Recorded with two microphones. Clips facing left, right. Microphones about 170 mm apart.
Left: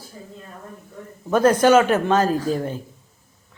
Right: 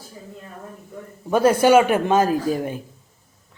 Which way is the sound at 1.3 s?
10° right (ahead or behind).